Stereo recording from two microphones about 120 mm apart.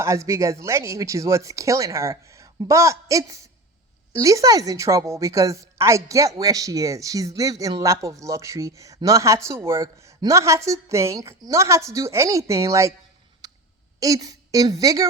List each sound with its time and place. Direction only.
0.0 s a woman's voice: 25° right (ahead or behind)
13.4 s a sound: 35° right (ahead or behind)
14.0 s a woman's voice: 30° right (ahead or behind)